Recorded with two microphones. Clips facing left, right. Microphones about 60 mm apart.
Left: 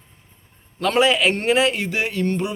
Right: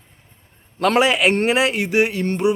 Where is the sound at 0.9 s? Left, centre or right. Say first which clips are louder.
Even; right.